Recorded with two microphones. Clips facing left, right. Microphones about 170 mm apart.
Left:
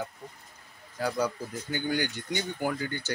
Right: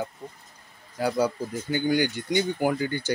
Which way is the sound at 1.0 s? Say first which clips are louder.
Right 5 dB; 10° right (ahead or behind).